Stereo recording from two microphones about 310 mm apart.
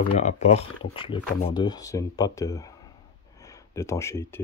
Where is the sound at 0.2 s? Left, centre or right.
Left.